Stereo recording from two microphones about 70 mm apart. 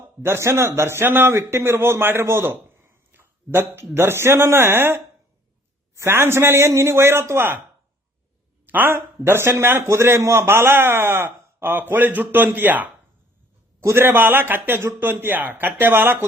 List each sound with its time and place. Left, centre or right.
0.2 s a man's voice: right
8.6 s a man's voice: right
13.8 s a man's voice: right